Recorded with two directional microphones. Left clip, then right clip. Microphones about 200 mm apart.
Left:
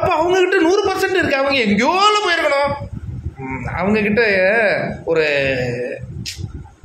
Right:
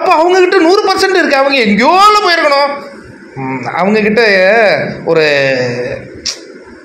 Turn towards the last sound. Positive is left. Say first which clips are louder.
# right 7 dB
turn(degrees=-15)  # may be behind; listen again after turning